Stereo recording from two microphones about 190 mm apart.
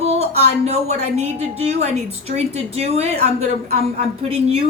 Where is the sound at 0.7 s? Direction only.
35° right (ahead or behind).